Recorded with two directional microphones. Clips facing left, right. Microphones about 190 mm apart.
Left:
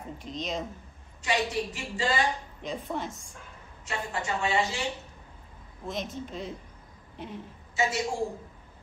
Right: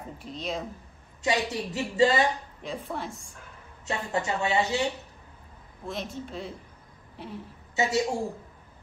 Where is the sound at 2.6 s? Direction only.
Centre (ahead or behind).